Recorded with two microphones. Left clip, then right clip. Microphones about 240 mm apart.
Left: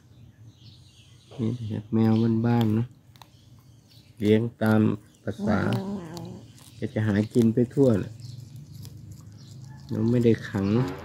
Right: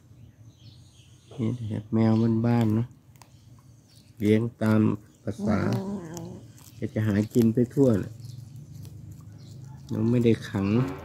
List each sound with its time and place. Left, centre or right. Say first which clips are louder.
1.4 s speech: even; centre
2.6 s a sound: even; centre
4.2 s speech: left 2 dB; centre
9.8 s speech: left 1 dB; centre